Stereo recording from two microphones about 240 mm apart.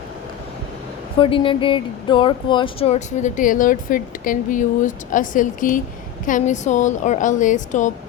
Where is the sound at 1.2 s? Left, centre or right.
Left.